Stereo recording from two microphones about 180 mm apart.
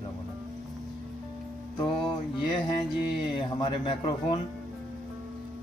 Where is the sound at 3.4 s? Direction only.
30° left (ahead or behind).